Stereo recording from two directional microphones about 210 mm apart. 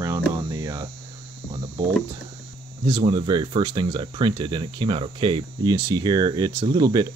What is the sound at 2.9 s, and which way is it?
Speech, 20° right (ahead or behind).